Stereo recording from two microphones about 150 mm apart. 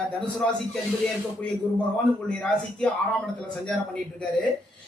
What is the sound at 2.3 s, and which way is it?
Speech, 5° left (ahead or behind).